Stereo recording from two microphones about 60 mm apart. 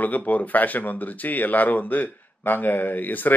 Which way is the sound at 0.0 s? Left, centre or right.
Left.